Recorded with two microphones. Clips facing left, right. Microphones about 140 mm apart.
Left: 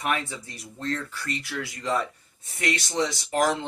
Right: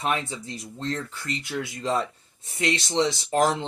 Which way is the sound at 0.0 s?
25° right (ahead or behind).